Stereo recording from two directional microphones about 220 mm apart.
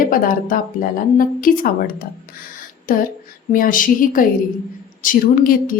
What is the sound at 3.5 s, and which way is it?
Speech, 40° left (ahead or behind).